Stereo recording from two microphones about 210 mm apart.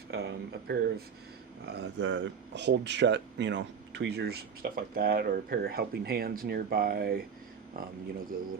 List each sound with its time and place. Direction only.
0.1 s speech: 50° right (ahead or behind)